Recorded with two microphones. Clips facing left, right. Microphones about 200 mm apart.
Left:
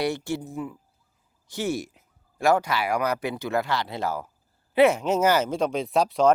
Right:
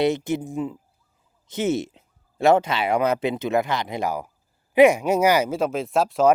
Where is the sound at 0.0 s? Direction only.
20° right (ahead or behind).